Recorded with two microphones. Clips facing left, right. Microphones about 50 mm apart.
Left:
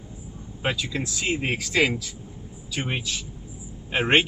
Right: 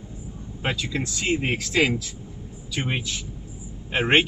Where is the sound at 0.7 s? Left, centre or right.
Centre.